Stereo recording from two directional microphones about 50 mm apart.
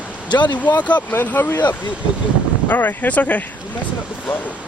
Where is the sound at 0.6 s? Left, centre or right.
Left.